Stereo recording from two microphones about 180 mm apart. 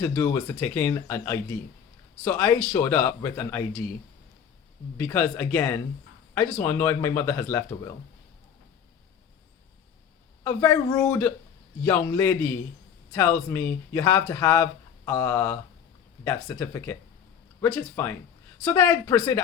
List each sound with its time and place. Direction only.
0.0 s speech: 15° left (ahead or behind)
4.9 s speech: 10° left (ahead or behind)
10.4 s speech: 15° left (ahead or behind)